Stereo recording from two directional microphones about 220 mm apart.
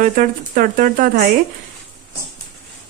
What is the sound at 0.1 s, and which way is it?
Speech, 35° right (ahead or behind).